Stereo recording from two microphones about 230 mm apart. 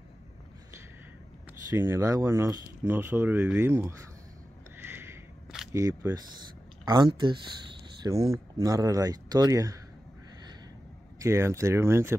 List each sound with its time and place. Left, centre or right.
1.7 s speech: centre
4.7 s single-lens reflex camera: centre
5.8 s speech: centre
11.1 s speech: centre